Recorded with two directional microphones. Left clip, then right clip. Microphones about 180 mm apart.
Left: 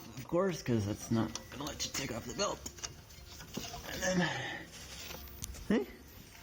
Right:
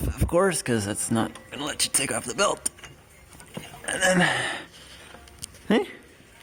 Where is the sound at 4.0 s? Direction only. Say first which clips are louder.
Right 13 dB; 40° right (ahead or behind).